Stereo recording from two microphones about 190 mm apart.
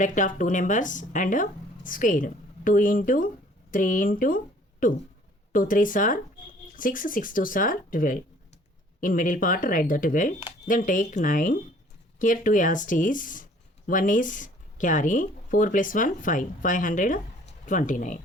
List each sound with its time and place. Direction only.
0.0 s speech: 45° left (ahead or behind)